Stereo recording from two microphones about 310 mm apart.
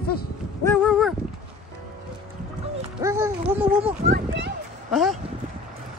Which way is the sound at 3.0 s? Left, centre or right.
Centre.